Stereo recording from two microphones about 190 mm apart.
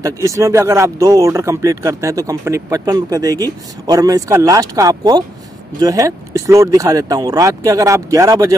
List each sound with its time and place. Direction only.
0.0 s speech: 15° right (ahead or behind)